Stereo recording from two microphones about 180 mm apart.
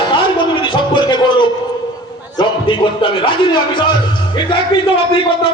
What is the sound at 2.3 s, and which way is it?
A man's voice, 25° left (ahead or behind).